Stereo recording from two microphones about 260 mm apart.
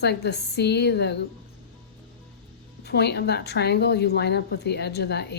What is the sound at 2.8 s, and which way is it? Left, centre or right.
Speech, left.